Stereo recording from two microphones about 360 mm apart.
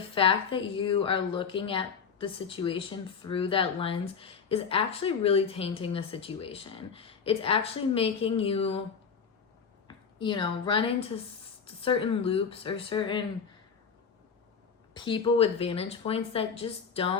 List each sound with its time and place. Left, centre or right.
0.1 s a woman's voice: centre
9.8 s a woman's voice: centre
14.9 s a woman's voice: centre